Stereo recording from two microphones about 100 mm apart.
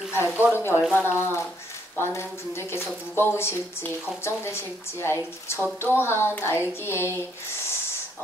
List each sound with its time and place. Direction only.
0.1 s speech: 25° left (ahead or behind)